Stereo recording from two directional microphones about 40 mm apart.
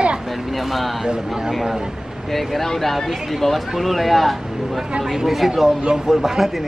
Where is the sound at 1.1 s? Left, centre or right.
Centre.